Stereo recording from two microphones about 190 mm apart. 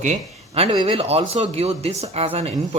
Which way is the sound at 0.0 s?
35° right (ahead or behind).